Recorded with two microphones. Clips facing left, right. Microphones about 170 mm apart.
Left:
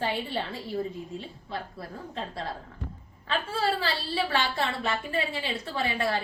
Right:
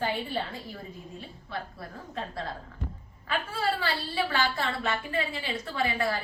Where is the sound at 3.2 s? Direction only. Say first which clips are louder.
Left 2 dB; 25° left (ahead or behind).